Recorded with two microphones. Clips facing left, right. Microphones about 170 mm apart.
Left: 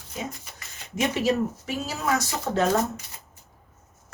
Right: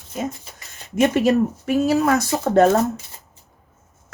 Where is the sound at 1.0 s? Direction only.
55° right (ahead or behind).